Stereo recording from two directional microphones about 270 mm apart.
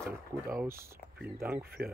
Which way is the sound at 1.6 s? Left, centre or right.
Right.